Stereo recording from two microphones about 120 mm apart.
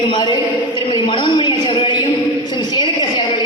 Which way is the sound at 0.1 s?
35° left (ahead or behind).